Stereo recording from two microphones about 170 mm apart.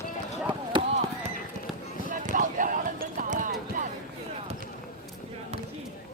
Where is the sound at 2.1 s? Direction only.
50° right (ahead or behind).